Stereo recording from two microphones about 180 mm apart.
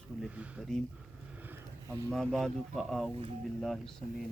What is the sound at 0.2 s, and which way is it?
Speech, 5° right (ahead or behind).